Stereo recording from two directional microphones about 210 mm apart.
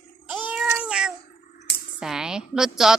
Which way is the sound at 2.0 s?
5° right (ahead or behind).